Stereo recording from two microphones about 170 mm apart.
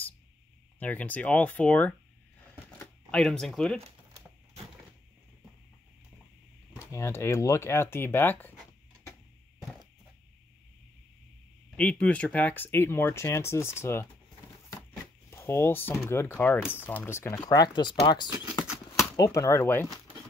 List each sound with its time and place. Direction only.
0.7 s speech: 10° left (ahead or behind)
3.7 s a sound: 35° right (ahead or behind)
6.8 s speech: 15° left (ahead or behind)
11.7 s speech: 10° left (ahead or behind)
15.3 s speech: 15° left (ahead or behind)